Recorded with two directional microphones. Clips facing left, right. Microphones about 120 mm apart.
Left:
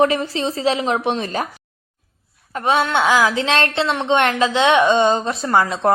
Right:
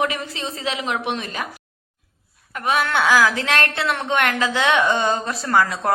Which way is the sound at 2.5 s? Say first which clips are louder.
Left 3 dB; 30° left (ahead or behind).